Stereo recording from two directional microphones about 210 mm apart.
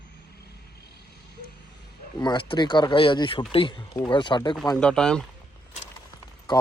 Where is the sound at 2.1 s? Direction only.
20° left (ahead or behind).